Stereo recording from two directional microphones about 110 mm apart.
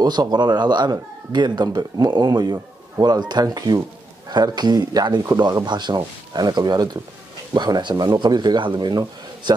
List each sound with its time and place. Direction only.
0.0 s speech: 40° right (ahead or behind)